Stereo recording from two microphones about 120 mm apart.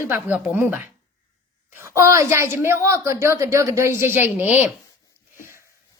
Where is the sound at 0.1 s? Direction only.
15° right (ahead or behind).